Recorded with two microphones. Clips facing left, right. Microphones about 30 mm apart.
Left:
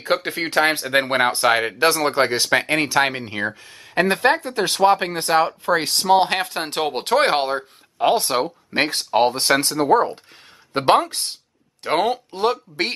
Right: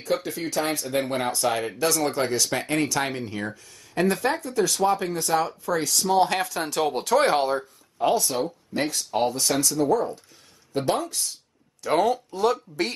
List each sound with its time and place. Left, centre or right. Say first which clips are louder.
0.0 s speech: left 5 dB; left